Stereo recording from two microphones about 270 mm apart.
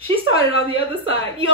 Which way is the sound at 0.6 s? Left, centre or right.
Centre.